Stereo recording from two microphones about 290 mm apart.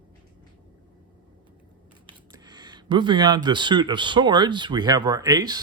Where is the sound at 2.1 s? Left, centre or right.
Centre.